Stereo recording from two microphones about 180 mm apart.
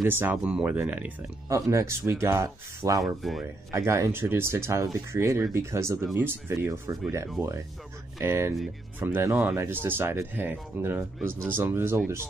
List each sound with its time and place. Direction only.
0.0 s speech: 10° right (ahead or behind)
3.2 s speech: centre (ahead or behind)
3.7 s speech: 15° right (ahead or behind)